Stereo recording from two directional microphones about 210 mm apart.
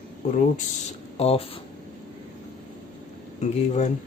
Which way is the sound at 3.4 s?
35° left (ahead or behind).